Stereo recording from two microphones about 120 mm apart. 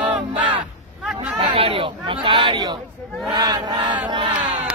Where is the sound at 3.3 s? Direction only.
35° right (ahead or behind).